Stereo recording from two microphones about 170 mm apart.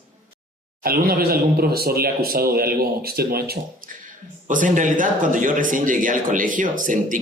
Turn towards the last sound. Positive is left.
turn(degrees=-50)  # may be behind; listen again after turning